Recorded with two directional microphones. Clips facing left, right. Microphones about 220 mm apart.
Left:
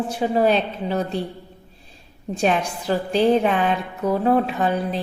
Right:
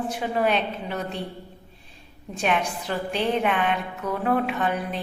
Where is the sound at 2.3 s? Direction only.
35° left (ahead or behind).